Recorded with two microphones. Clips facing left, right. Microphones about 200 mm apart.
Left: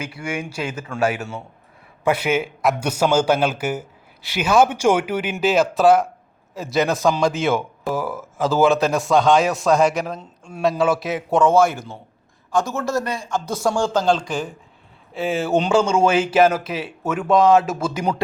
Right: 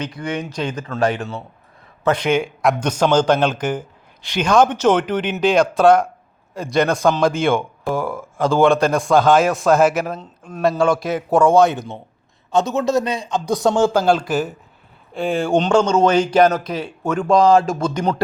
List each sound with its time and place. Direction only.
0.0 s a man's voice: 10° left (ahead or behind)
11.3 s a man's voice: 15° right (ahead or behind)
13.9 s a man's voice: 10° right (ahead or behind); by 18.2 s 10° left (ahead or behind)